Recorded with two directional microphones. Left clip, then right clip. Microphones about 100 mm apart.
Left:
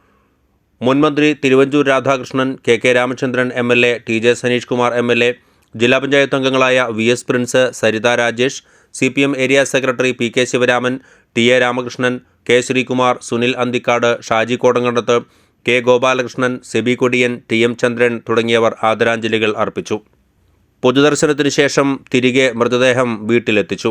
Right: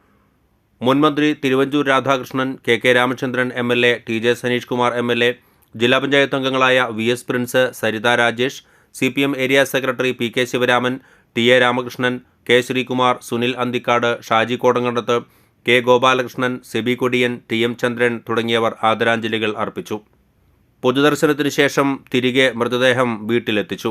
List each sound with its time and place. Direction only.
0.8 s speech: 25° left (ahead or behind); by 21.8 s 40° left (ahead or behind)
21.8 s speech: 25° left (ahead or behind)
22.2 s speech: 40° left (ahead or behind)